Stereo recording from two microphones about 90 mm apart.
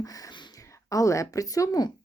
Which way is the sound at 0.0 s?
40° left (ahead or behind).